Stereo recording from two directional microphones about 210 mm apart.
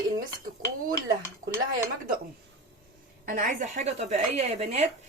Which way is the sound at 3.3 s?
40° right (ahead or behind).